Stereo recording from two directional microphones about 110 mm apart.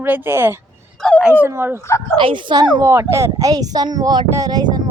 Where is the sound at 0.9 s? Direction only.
10° left (ahead or behind).